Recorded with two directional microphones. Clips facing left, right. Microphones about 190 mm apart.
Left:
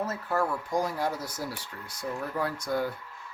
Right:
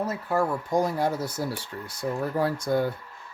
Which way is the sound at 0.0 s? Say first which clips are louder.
Right 3 dB; 15° right (ahead or behind).